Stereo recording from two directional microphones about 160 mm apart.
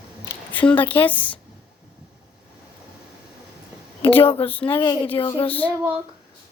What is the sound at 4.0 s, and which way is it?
A woman's voice, 35° left (ahead or behind).